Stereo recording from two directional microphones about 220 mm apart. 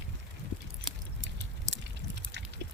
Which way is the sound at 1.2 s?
55° right (ahead or behind).